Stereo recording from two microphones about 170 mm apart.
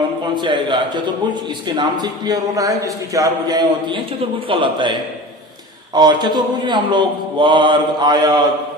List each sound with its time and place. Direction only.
0.3 s a man's voice: 25° right (ahead or behind)